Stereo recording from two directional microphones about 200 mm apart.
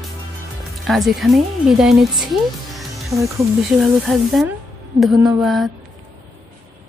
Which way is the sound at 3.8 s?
Centre (ahead or behind).